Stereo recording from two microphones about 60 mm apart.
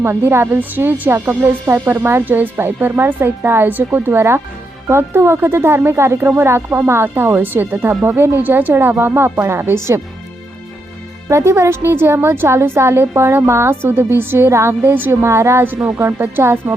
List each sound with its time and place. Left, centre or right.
0.0 s a woman's voice: right
11.3 s a woman's voice: right
14.8 s speech: right
15.2 s a woman's voice: right